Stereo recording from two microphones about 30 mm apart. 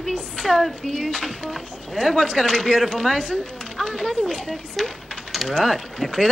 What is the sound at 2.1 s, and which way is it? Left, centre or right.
Speech, left.